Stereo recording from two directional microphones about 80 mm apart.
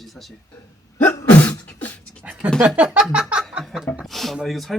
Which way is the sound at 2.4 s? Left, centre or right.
Centre.